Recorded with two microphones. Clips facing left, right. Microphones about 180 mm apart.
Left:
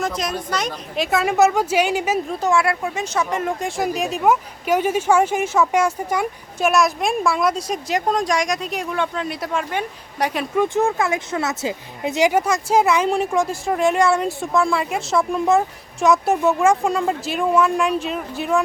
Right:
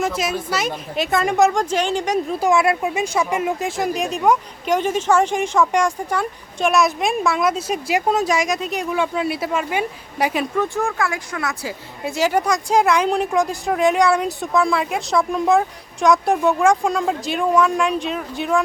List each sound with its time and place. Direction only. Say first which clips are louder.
0.0 s speech: right 2 dB; 5° right (ahead or behind)
2.4 s speech: right 3 dB; 20° right (ahead or behind)
10.6 s speech: left 5 dB; 20° left (ahead or behind)
12.4 s speech: even; 5° left (ahead or behind)